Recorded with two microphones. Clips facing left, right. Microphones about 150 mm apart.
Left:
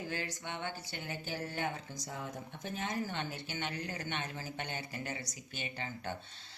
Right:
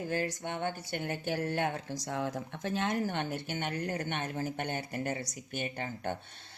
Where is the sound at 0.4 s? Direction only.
55° right (ahead or behind).